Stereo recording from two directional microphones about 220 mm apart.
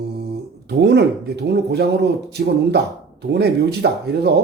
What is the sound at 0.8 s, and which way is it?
Speech, 50° right (ahead or behind).